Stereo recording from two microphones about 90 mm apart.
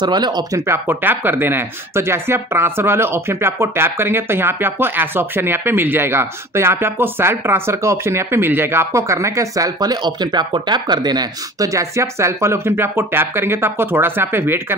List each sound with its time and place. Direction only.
0.0 s speech: 55° right (ahead or behind)
0.7 s speech: 20° right (ahead or behind)